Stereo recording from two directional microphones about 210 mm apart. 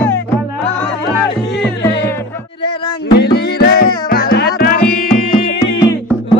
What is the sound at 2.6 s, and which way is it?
Music, 50° left (ahead or behind).